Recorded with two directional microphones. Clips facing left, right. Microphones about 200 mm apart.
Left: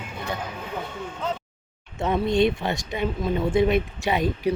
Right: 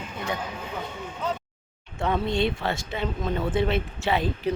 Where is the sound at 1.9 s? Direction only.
20° left (ahead or behind).